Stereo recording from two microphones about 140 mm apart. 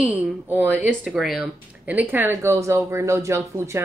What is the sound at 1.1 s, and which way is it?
Speech, centre (ahead or behind).